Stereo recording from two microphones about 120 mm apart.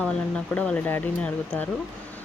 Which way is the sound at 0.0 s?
10° left (ahead or behind).